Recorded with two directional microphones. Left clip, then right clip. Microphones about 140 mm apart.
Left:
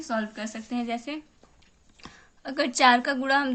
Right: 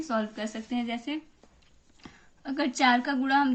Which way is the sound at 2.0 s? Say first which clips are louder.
Left 1 dB; 50° left (ahead or behind).